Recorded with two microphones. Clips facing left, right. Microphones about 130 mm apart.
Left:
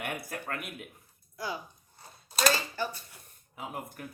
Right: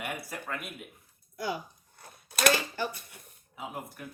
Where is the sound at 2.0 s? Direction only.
60° right (ahead or behind).